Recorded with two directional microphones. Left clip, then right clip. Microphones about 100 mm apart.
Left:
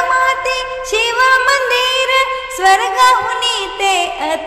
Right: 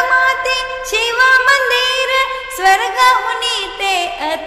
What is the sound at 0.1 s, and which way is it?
Music, 30° left (ahead or behind).